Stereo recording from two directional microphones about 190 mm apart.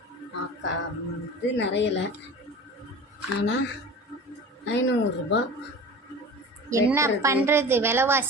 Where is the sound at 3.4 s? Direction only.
65° left (ahead or behind).